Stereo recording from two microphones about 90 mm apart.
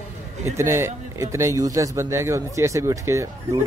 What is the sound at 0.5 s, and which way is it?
Speech, 30° right (ahead or behind).